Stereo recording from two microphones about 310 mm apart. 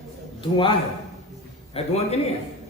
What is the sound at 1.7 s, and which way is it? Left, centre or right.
Speech, centre.